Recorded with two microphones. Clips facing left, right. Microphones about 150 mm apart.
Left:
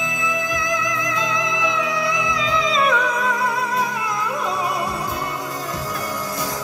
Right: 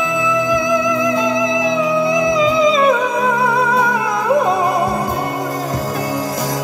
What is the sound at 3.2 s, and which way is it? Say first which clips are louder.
Music: right 6 dB; 80° right.